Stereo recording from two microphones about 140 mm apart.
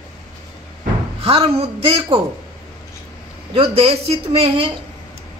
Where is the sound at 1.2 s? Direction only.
45° right (ahead or behind).